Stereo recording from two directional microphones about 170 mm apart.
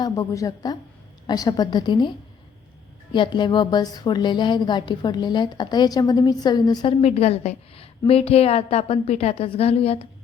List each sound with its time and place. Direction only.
0.0 s a woman's voice: 20° left (ahead or behind)
7.0 s a woman's voice: 40° left (ahead or behind)